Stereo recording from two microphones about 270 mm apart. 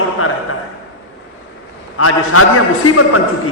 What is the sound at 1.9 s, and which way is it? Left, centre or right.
Speech, left.